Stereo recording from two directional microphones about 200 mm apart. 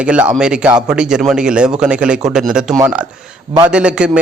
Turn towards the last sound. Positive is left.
turn(degrees=-5)  # may be behind; listen again after turning